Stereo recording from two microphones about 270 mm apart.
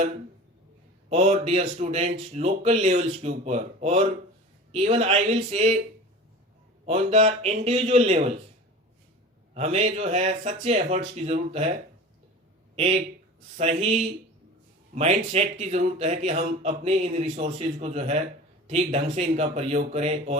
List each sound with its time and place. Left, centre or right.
1.1 s speech: right
6.8 s speech: right
9.6 s speech: right
12.7 s speech: right